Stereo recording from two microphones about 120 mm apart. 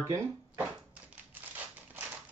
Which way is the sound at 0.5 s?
15° right (ahead or behind).